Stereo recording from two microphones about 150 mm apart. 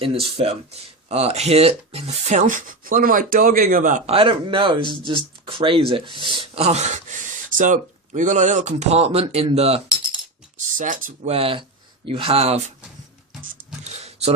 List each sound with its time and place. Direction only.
0.0 s speech: 40° right (ahead or behind); by 4.0 s 65° right (ahead or behind)
4.0 s speech: 40° right (ahead or behind)
10.8 s speech: 60° right (ahead or behind)
11.3 s speech: 40° right (ahead or behind)
14.0 s a sound: 45° right (ahead or behind)